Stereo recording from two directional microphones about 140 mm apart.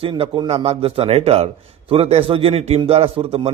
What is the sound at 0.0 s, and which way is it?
A man's voice, 40° right (ahead or behind).